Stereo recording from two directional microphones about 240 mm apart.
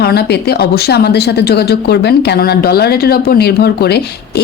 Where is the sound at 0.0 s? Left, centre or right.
Left.